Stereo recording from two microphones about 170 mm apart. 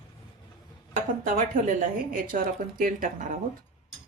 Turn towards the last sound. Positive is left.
turn(degrees=-55)  # may be behind; listen again after turning